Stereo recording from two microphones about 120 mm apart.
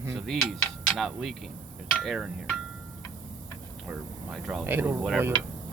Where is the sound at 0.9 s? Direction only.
Centre (ahead or behind).